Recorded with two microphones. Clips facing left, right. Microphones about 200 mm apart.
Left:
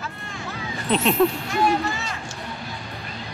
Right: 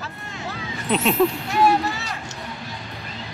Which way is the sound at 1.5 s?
35° right (ahead or behind).